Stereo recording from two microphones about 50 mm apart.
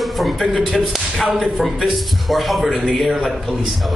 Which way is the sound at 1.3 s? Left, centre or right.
Centre.